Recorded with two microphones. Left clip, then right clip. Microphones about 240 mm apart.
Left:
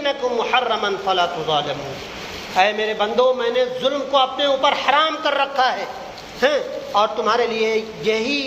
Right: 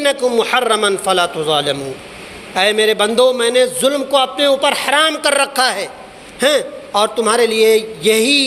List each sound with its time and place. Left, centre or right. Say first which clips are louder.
0.0 s a man's voice: right 6 dB; right